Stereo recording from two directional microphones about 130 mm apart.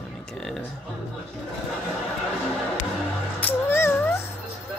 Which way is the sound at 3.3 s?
15° left (ahead or behind).